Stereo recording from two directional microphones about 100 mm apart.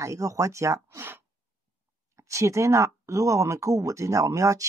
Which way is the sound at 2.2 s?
30° right (ahead or behind).